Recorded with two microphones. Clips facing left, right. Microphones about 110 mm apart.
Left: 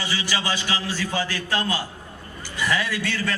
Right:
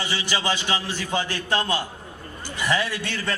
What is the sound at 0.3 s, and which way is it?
A man's voice, 25° right (ahead or behind).